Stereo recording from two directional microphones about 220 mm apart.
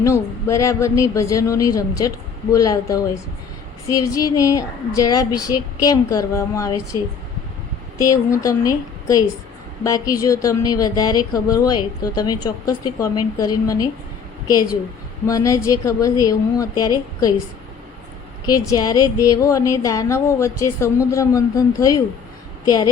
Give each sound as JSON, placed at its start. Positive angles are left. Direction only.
{"t": 0.0, "sound": "speech", "side_deg": 15}
{"t": 7.9, "sound": "speech", "side_deg": 15}
{"t": 18.7, "sound": "a woman's voice", "side_deg": 15}